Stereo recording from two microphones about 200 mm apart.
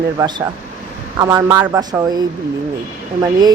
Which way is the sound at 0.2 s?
20° right (ahead or behind).